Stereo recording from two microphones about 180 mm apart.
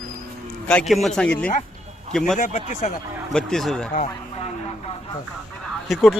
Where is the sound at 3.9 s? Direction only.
40° left (ahead or behind).